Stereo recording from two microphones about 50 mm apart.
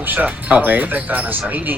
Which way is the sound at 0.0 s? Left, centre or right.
Right.